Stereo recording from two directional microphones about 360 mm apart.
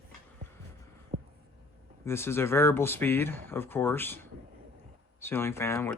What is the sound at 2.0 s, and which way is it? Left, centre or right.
Speech, centre.